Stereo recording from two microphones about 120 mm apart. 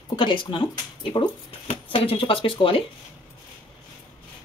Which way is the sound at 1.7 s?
50° left (ahead or behind).